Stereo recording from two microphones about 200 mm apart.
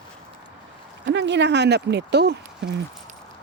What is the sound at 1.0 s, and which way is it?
Speech, 60° right (ahead or behind).